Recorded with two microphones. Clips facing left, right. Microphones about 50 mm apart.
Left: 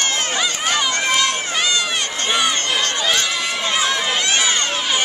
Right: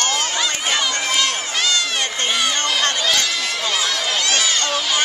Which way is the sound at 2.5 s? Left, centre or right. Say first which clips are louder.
Even; left.